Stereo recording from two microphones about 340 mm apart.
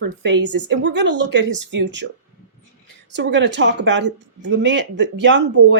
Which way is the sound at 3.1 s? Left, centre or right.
Right.